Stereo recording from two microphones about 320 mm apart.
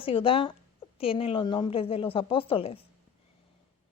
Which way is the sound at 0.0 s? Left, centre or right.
Centre.